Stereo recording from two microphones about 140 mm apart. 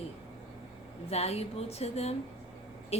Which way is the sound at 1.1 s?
45° left (ahead or behind).